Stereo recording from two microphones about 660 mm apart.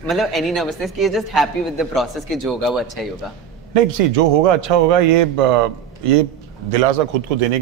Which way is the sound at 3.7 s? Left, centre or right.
Right.